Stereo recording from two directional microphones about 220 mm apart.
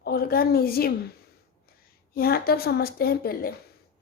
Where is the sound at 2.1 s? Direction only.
45° left (ahead or behind).